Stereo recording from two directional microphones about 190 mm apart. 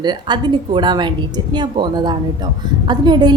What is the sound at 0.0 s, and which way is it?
A woman's voice, 20° right (ahead or behind).